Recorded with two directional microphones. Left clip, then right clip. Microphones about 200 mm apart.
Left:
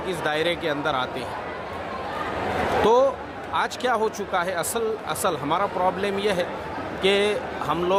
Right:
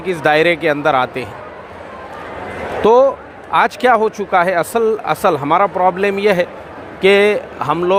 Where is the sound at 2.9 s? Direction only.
35° right (ahead or behind).